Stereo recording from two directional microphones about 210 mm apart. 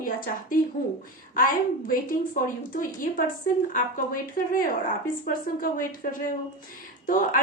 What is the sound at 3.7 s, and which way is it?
A woman's voice, 40° left (ahead or behind).